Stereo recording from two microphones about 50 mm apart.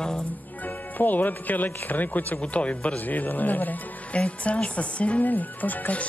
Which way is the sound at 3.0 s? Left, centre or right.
Left.